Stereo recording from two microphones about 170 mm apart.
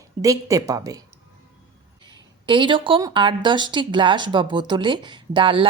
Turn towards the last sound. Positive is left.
turn(degrees=-30)  # may be behind; listen again after turning